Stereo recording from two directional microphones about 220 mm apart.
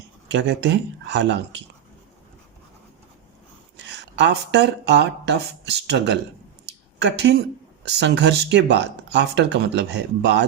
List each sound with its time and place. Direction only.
0.3 s speech: 55° right (ahead or behind)
3.8 s speech: 55° right (ahead or behind)